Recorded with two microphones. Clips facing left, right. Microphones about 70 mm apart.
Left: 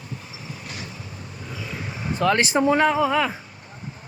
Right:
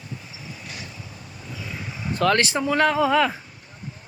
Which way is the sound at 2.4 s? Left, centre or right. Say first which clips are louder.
Left 4 dB; left.